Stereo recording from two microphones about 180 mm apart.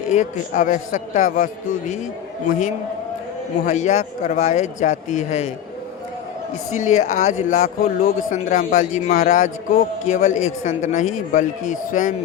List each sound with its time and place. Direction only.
0.1 s speech: 45° left (ahead or behind)
3.7 s speech: 40° left (ahead or behind)
6.7 s speech: 45° left (ahead or behind)